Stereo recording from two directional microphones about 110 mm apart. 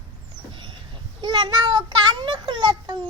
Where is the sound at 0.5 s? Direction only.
50° right (ahead or behind).